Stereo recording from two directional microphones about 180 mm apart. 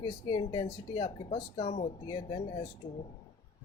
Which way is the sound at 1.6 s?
35° left (ahead or behind).